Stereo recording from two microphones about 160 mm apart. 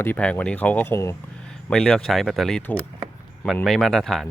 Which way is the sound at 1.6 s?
5° left (ahead or behind).